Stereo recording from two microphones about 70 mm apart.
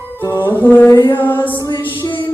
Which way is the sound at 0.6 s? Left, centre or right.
Left.